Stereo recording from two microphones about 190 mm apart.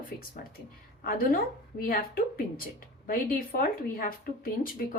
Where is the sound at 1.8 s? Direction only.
50° left (ahead or behind).